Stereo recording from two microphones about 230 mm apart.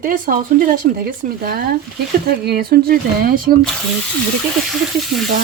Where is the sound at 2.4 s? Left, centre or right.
Right.